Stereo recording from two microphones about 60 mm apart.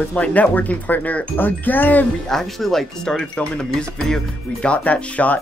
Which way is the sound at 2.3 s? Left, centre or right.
Centre.